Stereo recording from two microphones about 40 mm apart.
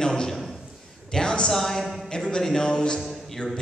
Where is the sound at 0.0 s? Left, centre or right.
Centre.